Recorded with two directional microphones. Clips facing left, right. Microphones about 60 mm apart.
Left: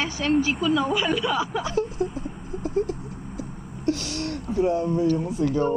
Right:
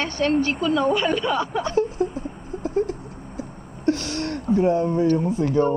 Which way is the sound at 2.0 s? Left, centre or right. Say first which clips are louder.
Right 3 dB; right.